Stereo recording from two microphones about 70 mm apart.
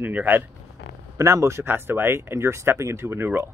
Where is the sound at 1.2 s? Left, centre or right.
Right.